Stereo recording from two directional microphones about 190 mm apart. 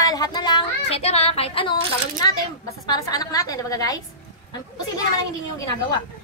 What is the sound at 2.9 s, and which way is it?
A woman's voice, 20° left (ahead or behind).